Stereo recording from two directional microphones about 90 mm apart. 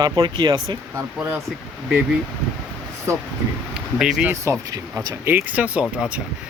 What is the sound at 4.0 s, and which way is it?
Speech, 10° right (ahead or behind).